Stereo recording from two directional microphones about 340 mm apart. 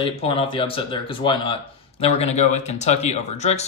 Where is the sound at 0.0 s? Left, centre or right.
Centre.